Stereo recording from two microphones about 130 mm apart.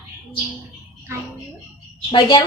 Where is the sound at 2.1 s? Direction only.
40° left (ahead or behind).